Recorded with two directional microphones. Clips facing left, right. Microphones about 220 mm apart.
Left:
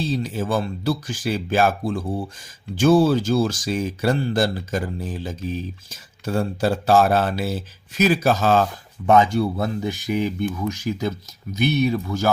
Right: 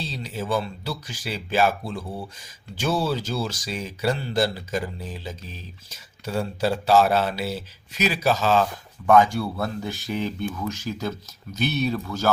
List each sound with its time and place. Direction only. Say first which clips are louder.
0.0 s speech: left 7 dB; 50° left (ahead or behind)
9.0 s speech: left 1 dB; 20° left (ahead or behind)